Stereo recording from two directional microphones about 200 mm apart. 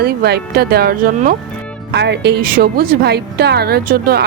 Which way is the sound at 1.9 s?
60° right (ahead or behind).